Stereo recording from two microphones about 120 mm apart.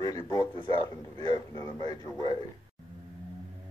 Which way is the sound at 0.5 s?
45° right (ahead or behind).